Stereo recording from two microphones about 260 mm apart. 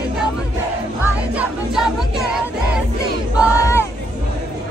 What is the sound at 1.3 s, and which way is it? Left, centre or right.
Music, centre.